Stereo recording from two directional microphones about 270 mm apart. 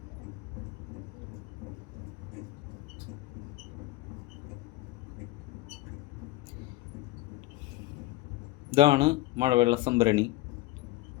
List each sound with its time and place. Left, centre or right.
8.7 s speech: centre